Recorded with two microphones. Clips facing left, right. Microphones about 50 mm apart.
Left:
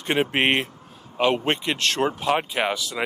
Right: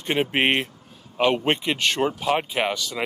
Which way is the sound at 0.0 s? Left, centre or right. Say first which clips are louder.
Even; centre.